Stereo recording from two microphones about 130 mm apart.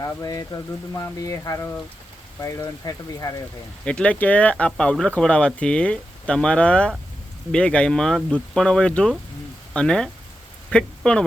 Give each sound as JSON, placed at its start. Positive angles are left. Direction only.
{"t": 0.0, "sound": "speech", "side_deg": 25}
{"t": 3.8, "sound": "speech", "side_deg": 10}